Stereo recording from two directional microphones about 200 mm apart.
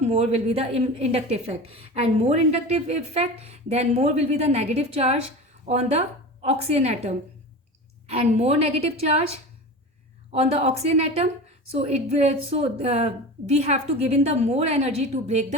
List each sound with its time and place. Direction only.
0.0 s a woman's voice: 30° right (ahead or behind)
8.1 s a woman's voice: 30° right (ahead or behind)
10.3 s a woman's voice: 30° right (ahead or behind)